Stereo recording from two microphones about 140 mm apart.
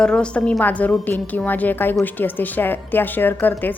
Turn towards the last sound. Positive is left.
turn(degrees=15)  # may be behind; listen again after turning